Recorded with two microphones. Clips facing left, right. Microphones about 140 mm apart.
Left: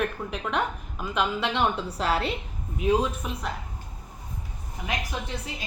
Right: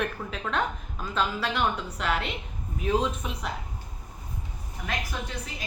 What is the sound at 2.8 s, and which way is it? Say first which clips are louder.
Speech: left 2 dB; 10° left (ahead or behind).